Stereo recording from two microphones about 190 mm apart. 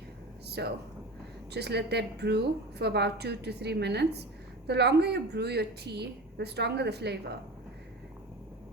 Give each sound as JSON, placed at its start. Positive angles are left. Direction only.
{"t": 0.4, "sound": "a woman's voice", "side_deg": -60}